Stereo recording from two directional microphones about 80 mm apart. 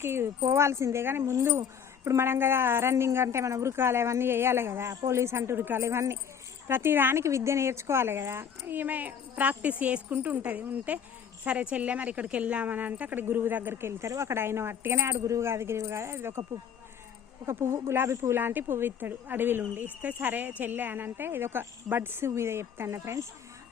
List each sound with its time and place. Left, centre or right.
0.0 s a woman's voice: right
17.4 s speech: right